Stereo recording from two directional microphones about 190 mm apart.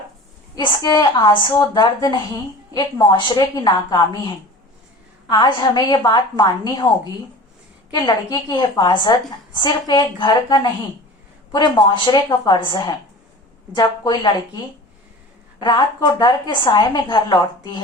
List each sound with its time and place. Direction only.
0.5 s a woman's voice: 20° left (ahead or behind)
15.6 s a woman's voice: 25° left (ahead or behind)